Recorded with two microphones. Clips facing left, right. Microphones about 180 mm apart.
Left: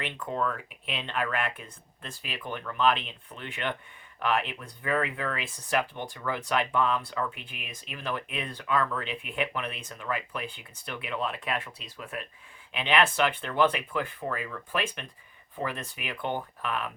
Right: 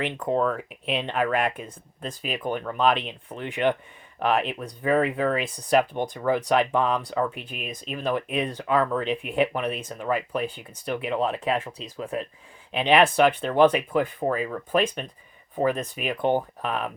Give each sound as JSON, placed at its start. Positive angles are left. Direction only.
{"t": 0.0, "sound": "speech", "side_deg": -35}